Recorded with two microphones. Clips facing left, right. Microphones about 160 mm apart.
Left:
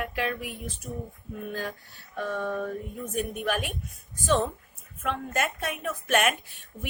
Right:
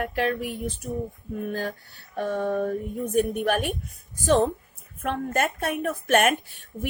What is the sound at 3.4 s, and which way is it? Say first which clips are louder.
Speech: right 5 dB; 55° right (ahead or behind).